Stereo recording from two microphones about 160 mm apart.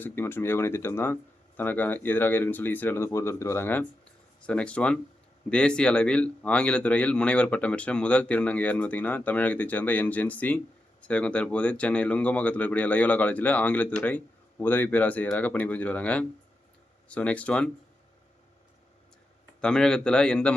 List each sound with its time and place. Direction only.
0.0 s speech: 15° left (ahead or behind)
19.6 s a man's voice: 5° left (ahead or behind)